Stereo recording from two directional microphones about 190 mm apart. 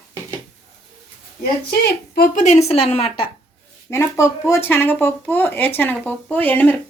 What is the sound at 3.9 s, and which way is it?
Speech, 15° left (ahead or behind).